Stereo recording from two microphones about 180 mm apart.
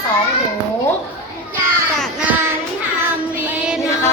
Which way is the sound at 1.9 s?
5° right (ahead or behind).